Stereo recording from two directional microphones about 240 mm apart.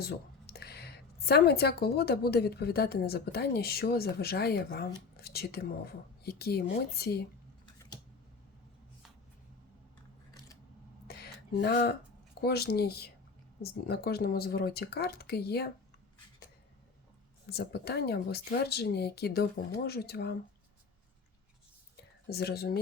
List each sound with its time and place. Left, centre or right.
0.0 s a woman's voice: left
11.1 s a sound: left
12.4 s a woman's voice: left
17.4 s a woman's voice: left
22.3 s a woman's voice: left